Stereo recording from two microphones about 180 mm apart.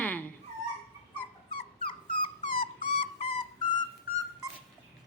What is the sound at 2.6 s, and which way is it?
Dog, 30° left (ahead or behind).